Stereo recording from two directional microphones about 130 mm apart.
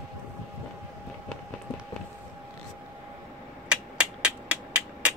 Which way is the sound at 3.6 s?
10° right (ahead or behind).